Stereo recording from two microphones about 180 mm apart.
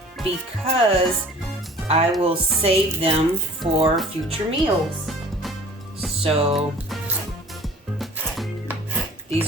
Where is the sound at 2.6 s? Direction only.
30° right (ahead or behind).